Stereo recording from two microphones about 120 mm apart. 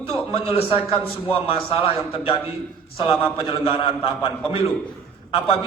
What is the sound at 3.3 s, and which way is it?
A man's voice, 45° left (ahead or behind).